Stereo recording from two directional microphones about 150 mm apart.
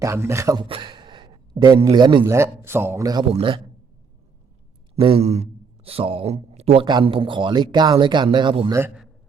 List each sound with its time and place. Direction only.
0.0 s speech: 20° right (ahead or behind)
2.2 s a man's voice: 20° right (ahead or behind)
3.3 s speech: 35° right (ahead or behind)
4.9 s speech: 40° right (ahead or behind)